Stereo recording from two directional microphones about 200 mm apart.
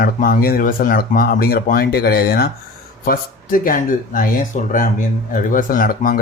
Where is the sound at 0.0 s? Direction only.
45° left (ahead or behind).